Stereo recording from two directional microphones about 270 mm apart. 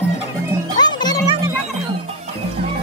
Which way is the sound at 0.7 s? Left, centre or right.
Centre.